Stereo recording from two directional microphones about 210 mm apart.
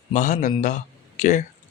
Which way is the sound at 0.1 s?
35° left (ahead or behind).